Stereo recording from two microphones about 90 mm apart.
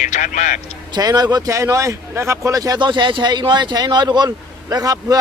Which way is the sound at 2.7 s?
60° right (ahead or behind).